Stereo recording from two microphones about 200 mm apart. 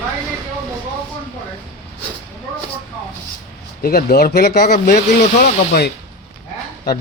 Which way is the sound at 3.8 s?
50° left (ahead or behind).